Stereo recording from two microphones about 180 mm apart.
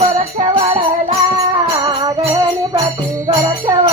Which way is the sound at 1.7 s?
20° right (ahead or behind).